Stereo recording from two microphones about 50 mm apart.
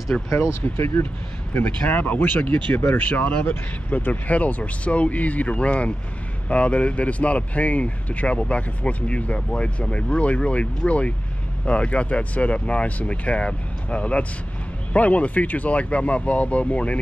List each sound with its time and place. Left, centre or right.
0.1 s speech: centre
0.6 s speech: left
1.5 s speech: left